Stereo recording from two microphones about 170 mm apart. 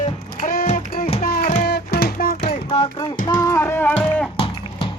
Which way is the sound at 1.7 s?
65° left (ahead or behind).